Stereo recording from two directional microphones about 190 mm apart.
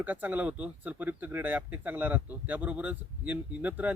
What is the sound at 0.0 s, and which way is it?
Speech, 10° right (ahead or behind).